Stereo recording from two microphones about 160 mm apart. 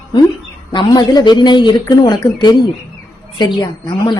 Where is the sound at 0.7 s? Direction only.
25° left (ahead or behind).